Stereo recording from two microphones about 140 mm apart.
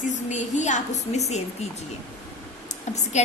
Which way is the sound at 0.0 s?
60° left (ahead or behind).